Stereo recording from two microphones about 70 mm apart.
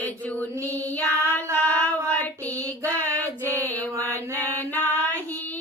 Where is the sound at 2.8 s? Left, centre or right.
Left.